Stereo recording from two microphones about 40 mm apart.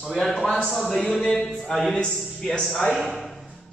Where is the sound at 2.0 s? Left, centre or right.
Centre.